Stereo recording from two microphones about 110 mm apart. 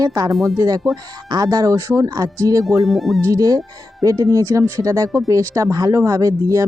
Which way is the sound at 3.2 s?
30° right (ahead or behind).